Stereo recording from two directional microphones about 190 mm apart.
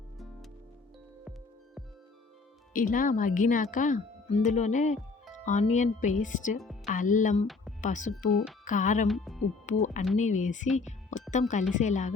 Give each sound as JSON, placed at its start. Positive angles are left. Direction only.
{"t": 2.7, "sound": "speech", "side_deg": 45}
{"t": 9.0, "sound": "a woman's voice", "side_deg": 0}
{"t": 9.6, "sound": "speech", "side_deg": 40}